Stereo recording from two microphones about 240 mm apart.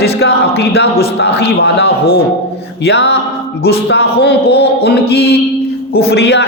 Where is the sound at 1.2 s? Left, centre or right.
Left.